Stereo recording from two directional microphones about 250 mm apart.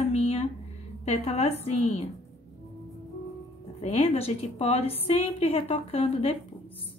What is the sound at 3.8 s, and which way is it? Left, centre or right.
A woman's voice, left.